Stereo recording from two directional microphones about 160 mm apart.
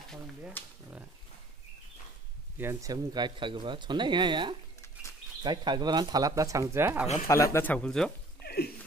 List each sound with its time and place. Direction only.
0.6 s speech: 10° left (ahead or behind)
2.5 s speech: 15° right (ahead or behind)
7.2 s speech: 20° left (ahead or behind)
8.4 s a sound: 80° left